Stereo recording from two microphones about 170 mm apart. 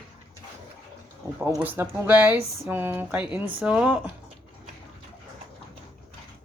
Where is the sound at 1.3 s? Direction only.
10° right (ahead or behind).